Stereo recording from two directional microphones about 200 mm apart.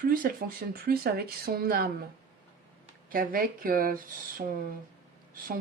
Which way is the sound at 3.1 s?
45° right (ahead or behind).